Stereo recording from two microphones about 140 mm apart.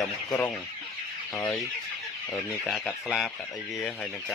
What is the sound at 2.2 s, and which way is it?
Speech, centre (ahead or behind).